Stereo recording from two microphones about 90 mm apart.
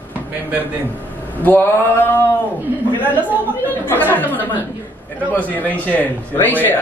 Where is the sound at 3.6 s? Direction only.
20° left (ahead or behind).